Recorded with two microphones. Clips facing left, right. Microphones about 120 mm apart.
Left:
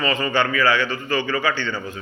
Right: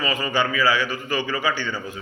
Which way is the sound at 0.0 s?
10° right (ahead or behind).